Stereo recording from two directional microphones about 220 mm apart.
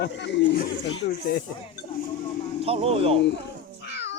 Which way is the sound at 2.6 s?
25° right (ahead or behind).